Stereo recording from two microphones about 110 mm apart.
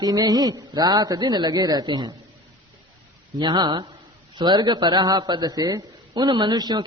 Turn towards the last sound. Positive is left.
turn(degrees=-35)  # may be behind; listen again after turning